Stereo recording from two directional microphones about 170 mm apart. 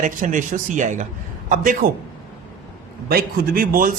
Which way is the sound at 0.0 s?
50° right (ahead or behind).